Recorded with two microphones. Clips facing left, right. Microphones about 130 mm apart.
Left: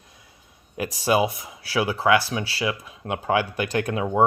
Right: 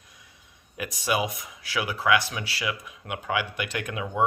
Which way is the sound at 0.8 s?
35° left (ahead or behind).